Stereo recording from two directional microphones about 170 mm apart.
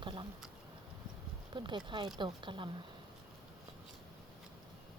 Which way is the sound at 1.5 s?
25° right (ahead or behind).